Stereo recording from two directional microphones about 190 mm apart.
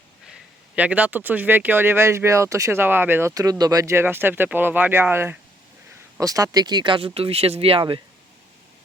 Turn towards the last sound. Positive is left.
turn(degrees=-30)  # may be behind; listen again after turning